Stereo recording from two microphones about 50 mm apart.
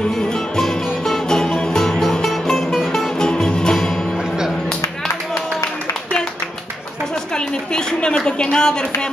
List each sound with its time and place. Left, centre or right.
0.3 s music: centre
3.2 s music: centre
7.3 s a sound: centre